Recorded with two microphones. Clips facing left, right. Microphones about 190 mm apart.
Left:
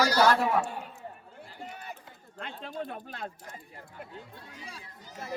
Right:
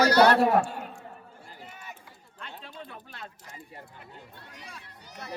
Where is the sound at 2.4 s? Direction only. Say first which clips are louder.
Left 6 dB; 50° left (ahead or behind).